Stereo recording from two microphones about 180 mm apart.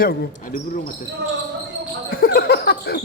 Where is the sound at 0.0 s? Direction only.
55° left (ahead or behind).